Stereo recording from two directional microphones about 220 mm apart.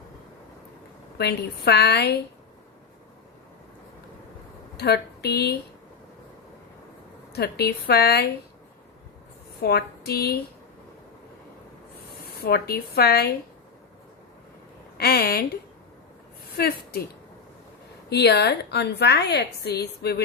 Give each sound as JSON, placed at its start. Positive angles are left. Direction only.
{"t": 1.2, "sound": "a woman's voice", "side_deg": 45}
{"t": 4.8, "sound": "speech", "side_deg": 45}
{"t": 7.3, "sound": "a woman's voice", "side_deg": 45}
{"t": 9.6, "sound": "a woman's voice", "side_deg": 45}
{"t": 12.5, "sound": "a woman's voice", "side_deg": 45}
{"t": 14.9, "sound": "a woman's voice", "side_deg": 45}
{"t": 16.6, "sound": "a woman's voice", "side_deg": 45}
{"t": 18.1, "sound": "a woman's voice", "side_deg": 50}